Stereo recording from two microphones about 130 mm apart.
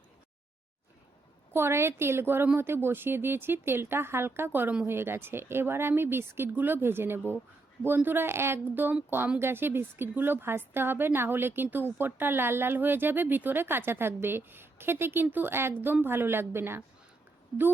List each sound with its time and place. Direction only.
1.5 s a woman's voice: 20° right (ahead or behind)